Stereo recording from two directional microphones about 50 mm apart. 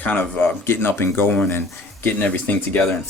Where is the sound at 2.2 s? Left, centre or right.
Left.